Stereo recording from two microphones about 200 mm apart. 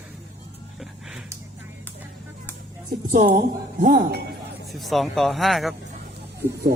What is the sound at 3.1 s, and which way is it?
Speech, 40° right (ahead or behind).